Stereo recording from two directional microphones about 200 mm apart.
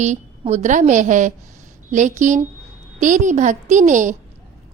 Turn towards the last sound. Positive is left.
turn(degrees=-40)  # may be behind; listen again after turning